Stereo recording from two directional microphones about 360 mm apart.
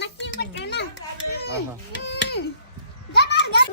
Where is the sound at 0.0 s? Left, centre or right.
Left.